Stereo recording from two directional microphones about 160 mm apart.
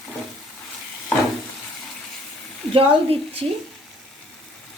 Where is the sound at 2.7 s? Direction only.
35° right (ahead or behind).